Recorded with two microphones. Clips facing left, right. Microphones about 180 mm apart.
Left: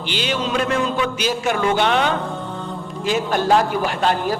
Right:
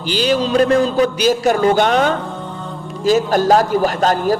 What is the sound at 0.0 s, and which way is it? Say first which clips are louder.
A man's voice: right 7 dB; 40° right (ahead or behind).